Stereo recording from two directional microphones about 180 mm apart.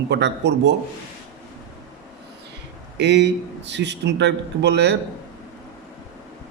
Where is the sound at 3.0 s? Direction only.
75° right (ahead or behind).